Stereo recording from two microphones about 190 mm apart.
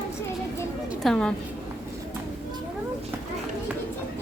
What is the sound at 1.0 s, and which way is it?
Speech, 5° left (ahead or behind).